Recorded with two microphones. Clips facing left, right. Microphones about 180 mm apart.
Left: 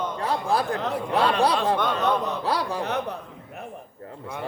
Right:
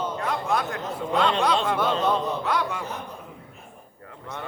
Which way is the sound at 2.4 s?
35° left (ahead or behind).